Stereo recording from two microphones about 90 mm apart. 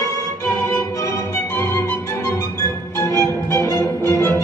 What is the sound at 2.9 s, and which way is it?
Music, 30° left (ahead or behind).